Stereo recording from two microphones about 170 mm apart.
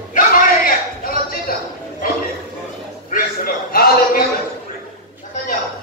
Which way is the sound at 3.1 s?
60° left (ahead or behind).